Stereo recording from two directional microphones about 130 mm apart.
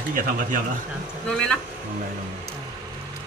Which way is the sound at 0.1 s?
90° right.